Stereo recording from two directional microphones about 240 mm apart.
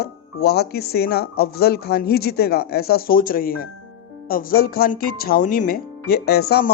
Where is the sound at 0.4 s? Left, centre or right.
Left.